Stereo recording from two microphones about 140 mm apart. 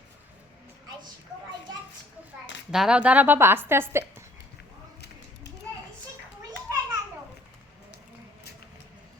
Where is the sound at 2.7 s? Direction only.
5° right (ahead or behind).